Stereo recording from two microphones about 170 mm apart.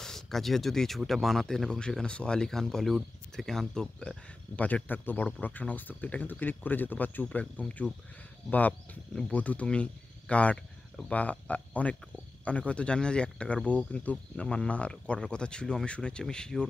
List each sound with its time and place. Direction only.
0.0 s speech: centre (ahead or behind)